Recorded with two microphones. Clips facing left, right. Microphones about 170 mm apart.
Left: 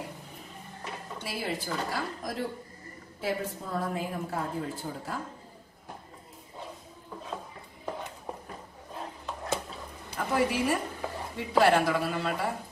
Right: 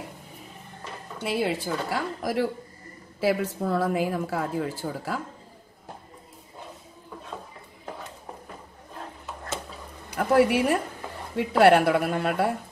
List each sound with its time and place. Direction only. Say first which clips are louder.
1.2 s a woman's voice: right 8 dB; 70° right (ahead or behind); by 5.2 s 85° right
10.1 s a woman's voice: right 7 dB; 65° right (ahead or behind)